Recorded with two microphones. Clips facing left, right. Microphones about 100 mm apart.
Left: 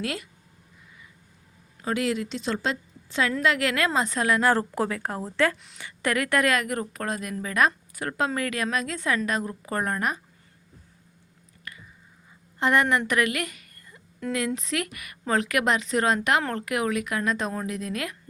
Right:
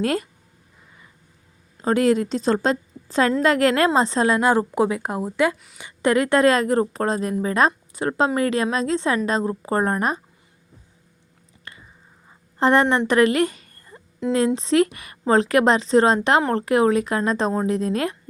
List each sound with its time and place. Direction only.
0.0 s a woman's voice: 40° right (ahead or behind)
1.8 s a woman's voice: 40° right (ahead or behind)
11.7 s whispering: 30° right (ahead or behind)
12.5 s a woman's voice: 30° right (ahead or behind)